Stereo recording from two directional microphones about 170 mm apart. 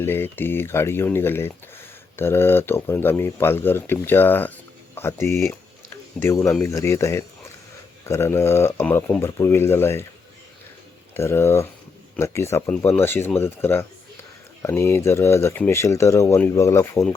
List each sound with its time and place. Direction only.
0.0 s speech: 15° left (ahead or behind)
11.1 s speech: 15° left (ahead or behind)